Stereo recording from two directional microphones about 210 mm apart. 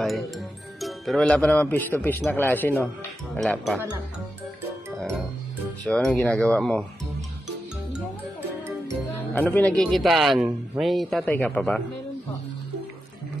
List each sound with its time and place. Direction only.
0.7 s a man's voice: centre (ahead or behind)
5.9 s a man's voice: 5° left (ahead or behind)
9.3 s a man's voice: 10° left (ahead or behind)